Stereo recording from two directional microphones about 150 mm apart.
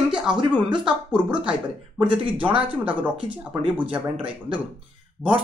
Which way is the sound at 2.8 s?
10° right (ahead or behind).